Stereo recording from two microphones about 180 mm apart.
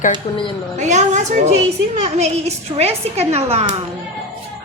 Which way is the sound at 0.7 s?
40° right (ahead or behind).